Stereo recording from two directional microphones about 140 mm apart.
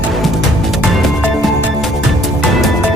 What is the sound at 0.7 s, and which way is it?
Music, 5° right (ahead or behind).